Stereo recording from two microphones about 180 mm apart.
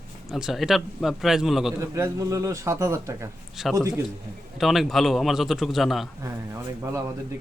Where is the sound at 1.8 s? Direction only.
20° right (ahead or behind).